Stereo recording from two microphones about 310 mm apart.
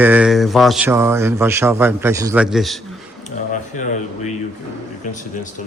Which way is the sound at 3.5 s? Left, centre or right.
Left.